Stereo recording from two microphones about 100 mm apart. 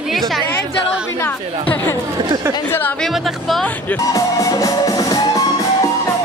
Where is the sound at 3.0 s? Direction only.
5° left (ahead or behind).